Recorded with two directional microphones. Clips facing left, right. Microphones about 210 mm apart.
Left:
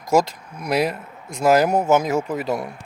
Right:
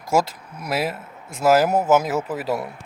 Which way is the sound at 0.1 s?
5° right (ahead or behind).